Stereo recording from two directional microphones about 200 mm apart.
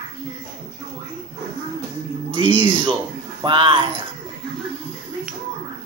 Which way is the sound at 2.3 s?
25° right (ahead or behind).